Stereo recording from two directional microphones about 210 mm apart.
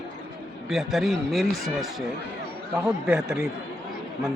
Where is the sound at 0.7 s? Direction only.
Centre (ahead or behind).